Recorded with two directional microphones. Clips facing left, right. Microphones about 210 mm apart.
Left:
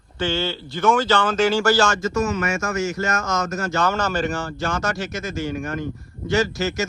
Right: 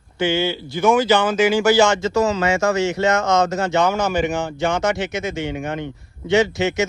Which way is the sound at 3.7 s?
20° right (ahead or behind).